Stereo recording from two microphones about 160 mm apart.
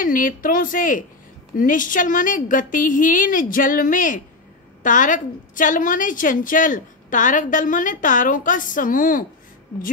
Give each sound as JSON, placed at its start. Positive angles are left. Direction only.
{"t": 0.0, "sound": "a woman's voice", "side_deg": 60}